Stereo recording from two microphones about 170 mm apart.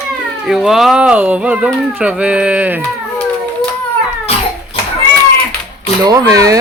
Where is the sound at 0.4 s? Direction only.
Centre (ahead or behind).